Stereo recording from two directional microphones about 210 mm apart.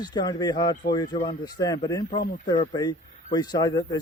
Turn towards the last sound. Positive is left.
turn(degrees=20)  # may be behind; listen again after turning